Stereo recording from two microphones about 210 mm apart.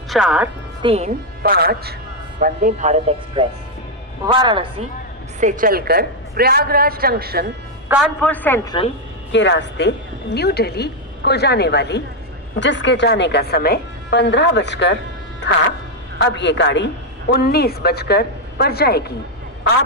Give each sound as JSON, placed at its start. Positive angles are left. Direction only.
{"t": 0.1, "sound": "a woman's voice", "side_deg": -5}
{"t": 0.8, "sound": "speech", "side_deg": -30}
{"t": 1.4, "sound": "a woman's voice", "side_deg": -45}
{"t": 2.4, "sound": "speech", "side_deg": -35}
{"t": 5.4, "sound": "a woman's voice", "side_deg": -40}
{"t": 8.2, "sound": "a woman's voice", "side_deg": 5}
{"t": 9.3, "sound": "a man's voice", "side_deg": 60}